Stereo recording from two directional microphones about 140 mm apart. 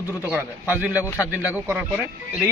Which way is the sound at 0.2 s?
10° right (ahead or behind).